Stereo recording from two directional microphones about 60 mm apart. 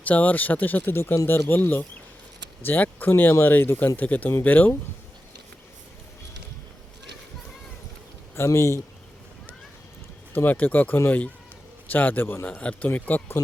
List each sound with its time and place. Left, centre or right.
0.0 s speech: left
3.9 s speech: left
8.4 s speech: left
10.3 s speech: left
12.5 s speech: centre